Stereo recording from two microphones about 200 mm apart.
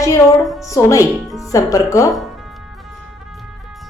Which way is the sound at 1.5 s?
15° left (ahead or behind).